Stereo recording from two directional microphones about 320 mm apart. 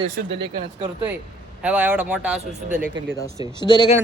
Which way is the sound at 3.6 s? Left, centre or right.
Centre.